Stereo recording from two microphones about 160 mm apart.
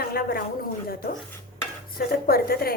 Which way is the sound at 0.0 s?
70° left (ahead or behind).